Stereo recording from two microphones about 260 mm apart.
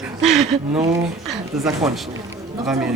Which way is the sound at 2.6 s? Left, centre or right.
Centre.